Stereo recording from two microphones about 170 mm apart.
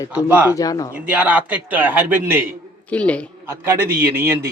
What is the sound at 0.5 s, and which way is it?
Speech, 20° left (ahead or behind).